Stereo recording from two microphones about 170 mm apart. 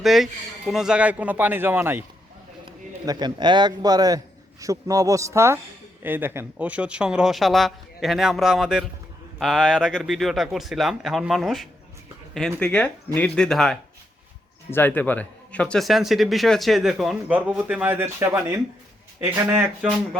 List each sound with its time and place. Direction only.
0.0 s a man's voice: centre (ahead or behind)
2.6 s a man's voice: 25° right (ahead or behind)